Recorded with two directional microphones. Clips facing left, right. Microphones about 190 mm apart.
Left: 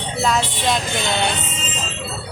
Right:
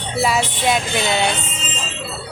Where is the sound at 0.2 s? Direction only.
5° right (ahead or behind).